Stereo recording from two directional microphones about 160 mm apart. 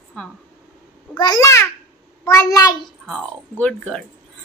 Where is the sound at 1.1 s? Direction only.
20° left (ahead or behind).